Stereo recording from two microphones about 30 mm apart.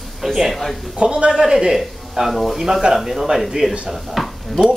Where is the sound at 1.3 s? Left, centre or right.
Centre.